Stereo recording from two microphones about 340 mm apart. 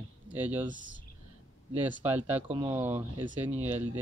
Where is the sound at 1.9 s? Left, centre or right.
Centre.